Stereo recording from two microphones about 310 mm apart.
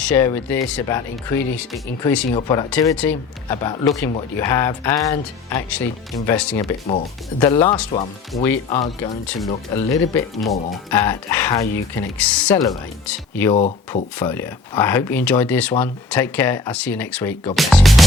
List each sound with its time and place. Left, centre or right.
0.2 s speech: centre
2.3 s speech: centre
6.6 s speech: centre
10.4 s speech: centre
13.5 s speech: centre
14.2 s speech: centre